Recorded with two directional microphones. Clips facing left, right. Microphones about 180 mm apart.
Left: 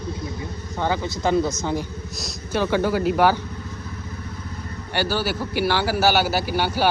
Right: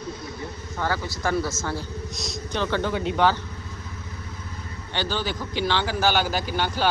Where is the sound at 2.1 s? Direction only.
Centre (ahead or behind).